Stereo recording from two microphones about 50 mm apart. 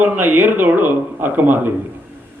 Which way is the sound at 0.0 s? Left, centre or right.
Right.